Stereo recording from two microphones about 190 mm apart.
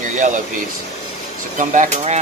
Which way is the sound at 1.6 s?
40° right (ahead or behind).